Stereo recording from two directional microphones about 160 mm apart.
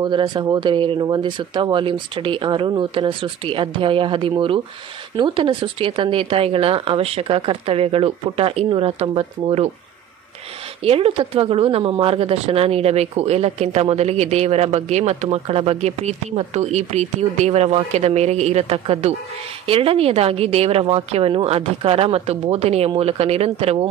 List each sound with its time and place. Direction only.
0.0 s speech: 30° right (ahead or behind)
10.8 s speech: 35° right (ahead or behind)